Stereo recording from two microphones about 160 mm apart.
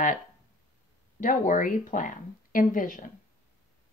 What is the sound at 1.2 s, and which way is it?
Speech, 55° left (ahead or behind).